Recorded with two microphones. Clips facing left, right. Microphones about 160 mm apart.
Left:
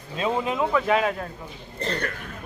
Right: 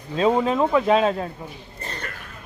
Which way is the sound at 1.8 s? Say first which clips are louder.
Left 8 dB; 75° left (ahead or behind).